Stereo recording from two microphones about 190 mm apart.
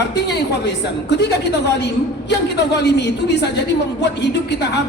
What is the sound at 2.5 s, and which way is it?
A woman's voice, 65° left (ahead or behind).